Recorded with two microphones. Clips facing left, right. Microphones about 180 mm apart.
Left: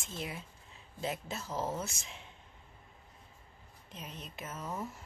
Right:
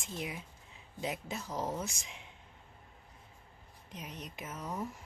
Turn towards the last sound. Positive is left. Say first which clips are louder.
# right 1 dB
turn(degrees=-15)  # may be behind; listen again after turning